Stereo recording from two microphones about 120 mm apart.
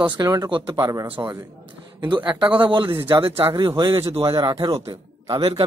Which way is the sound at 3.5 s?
40° right (ahead or behind).